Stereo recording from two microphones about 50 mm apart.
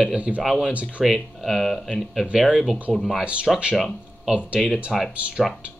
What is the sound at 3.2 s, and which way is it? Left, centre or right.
Speech, right.